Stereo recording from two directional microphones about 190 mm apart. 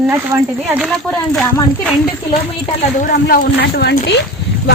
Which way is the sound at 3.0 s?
50° left (ahead or behind).